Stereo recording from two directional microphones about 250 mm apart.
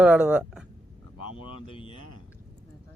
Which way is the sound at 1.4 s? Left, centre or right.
Left.